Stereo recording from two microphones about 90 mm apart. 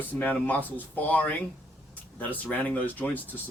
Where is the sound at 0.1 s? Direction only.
20° left (ahead or behind).